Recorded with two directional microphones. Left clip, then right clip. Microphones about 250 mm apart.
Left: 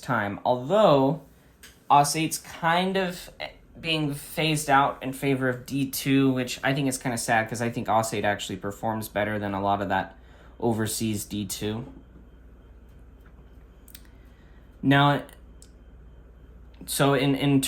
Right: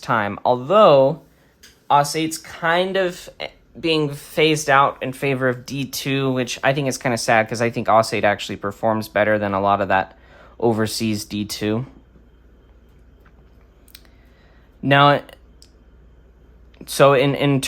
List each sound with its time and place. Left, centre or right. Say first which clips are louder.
0.0 s speech: right 7 dB; right
14.8 s clicking: right 7 dB; right
16.7 s speech: right 10 dB; right